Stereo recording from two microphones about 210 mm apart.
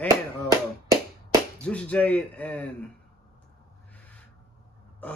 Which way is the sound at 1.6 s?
5° left (ahead or behind).